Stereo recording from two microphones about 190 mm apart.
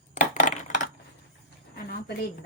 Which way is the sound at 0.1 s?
40° left (ahead or behind).